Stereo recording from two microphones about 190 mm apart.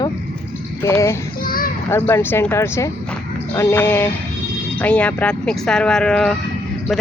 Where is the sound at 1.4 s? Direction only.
50° left (ahead or behind).